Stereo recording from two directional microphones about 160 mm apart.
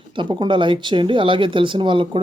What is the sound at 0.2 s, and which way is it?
Speech, 30° right (ahead or behind).